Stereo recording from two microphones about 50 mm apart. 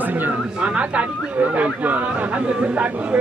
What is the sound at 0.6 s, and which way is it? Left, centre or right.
Speech, right.